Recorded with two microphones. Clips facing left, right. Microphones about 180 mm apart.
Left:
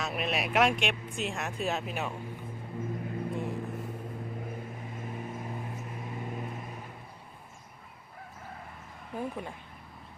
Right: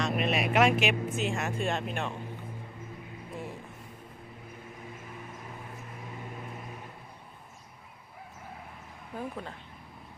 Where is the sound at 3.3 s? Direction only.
Centre (ahead or behind).